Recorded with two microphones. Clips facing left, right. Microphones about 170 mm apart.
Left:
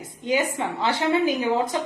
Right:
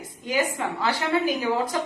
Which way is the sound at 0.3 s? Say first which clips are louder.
Left 2 dB; 25° left (ahead or behind).